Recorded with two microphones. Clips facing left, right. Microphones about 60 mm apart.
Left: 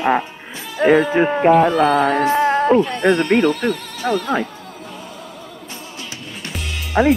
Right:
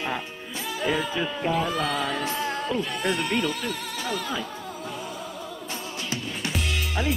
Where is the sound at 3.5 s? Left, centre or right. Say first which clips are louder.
Left 11 dB; centre.